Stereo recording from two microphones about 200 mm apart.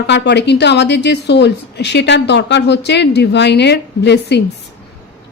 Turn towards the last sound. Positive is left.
turn(degrees=55)  # may be behind; listen again after turning